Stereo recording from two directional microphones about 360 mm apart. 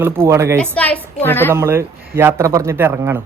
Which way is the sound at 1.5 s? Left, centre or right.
Centre.